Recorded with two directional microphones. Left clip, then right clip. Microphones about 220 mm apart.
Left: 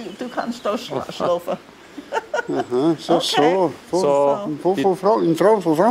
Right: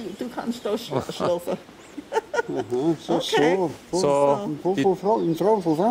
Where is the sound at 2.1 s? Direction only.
Centre (ahead or behind).